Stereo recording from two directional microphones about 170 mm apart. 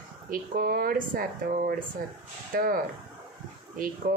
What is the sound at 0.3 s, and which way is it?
Speech, 60° right (ahead or behind).